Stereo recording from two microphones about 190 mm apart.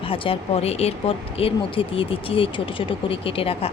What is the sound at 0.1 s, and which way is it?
Speech, 30° left (ahead or behind).